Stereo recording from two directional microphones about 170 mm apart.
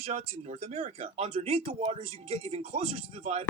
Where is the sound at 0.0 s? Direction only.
40° right (ahead or behind).